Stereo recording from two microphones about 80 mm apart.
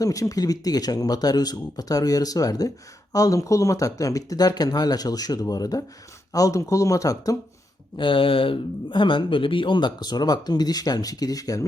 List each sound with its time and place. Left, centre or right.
0.0 s speech: left
7.9 s speech: left